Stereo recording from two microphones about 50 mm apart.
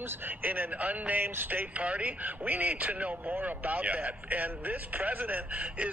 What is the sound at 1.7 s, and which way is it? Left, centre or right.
Speech, right.